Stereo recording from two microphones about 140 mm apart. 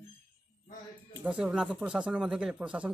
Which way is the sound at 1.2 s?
5° right (ahead or behind).